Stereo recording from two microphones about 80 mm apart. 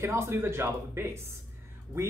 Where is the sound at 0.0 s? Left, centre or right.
Right.